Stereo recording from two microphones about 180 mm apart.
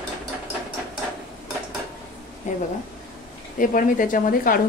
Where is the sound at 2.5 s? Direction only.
40° left (ahead or behind).